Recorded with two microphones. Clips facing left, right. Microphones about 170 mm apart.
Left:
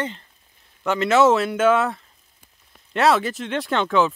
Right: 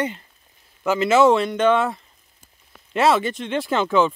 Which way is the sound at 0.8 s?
Centre (ahead or behind).